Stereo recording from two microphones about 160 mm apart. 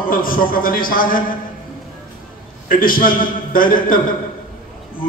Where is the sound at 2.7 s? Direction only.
60° left (ahead or behind).